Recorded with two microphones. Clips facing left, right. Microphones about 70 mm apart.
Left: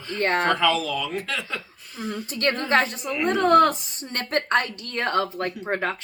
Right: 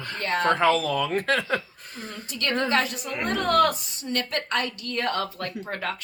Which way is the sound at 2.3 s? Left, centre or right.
Left.